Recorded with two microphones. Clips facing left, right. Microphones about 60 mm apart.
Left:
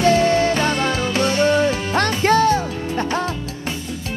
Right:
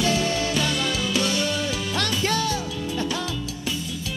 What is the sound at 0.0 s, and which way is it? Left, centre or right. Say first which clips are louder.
Music: left 8 dB; left.